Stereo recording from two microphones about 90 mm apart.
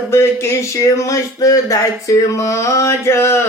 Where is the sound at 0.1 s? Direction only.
30° left (ahead or behind).